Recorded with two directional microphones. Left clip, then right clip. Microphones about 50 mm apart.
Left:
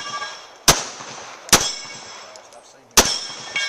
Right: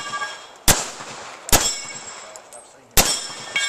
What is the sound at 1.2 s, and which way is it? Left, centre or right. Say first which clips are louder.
Clang: left 3 dB; centre.